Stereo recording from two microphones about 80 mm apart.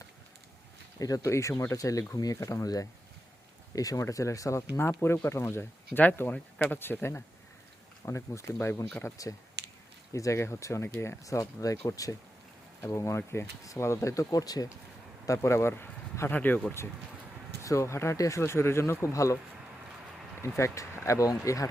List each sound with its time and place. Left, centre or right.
0.9 s speech: left
8.0 s speech: left
9.2 s speech: left
11.3 s speech: left
12.8 s speech: left
15.4 s speech: left
17.6 s speech: left
20.6 s speech: left